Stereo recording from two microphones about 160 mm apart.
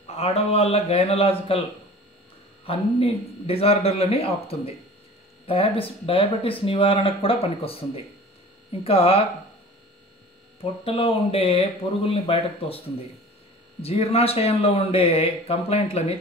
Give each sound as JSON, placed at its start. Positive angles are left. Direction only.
{"t": 0.0, "sound": "a man's voice", "side_deg": 40}
{"t": 2.6, "sound": "a man's voice", "side_deg": 35}
{"t": 10.6, "sound": "a man's voice", "side_deg": 35}